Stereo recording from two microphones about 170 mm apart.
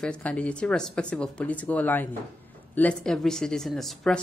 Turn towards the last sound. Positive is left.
turn(degrees=0)  # may be behind; listen again after turning